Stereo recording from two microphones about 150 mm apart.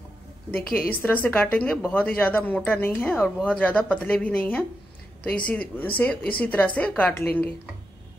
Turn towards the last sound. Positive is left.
turn(degrees=10)  # may be behind; listen again after turning